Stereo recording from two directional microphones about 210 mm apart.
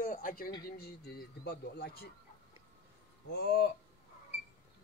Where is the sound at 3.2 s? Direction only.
50° left (ahead or behind).